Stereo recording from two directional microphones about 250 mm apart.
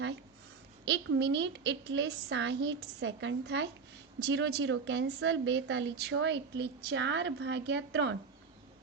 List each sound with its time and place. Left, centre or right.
0.9 s a woman's voice: right